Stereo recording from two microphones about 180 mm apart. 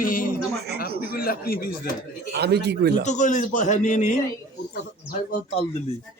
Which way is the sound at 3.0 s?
40° left (ahead or behind).